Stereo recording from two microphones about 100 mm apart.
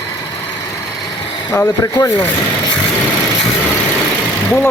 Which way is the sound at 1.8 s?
35° left (ahead or behind).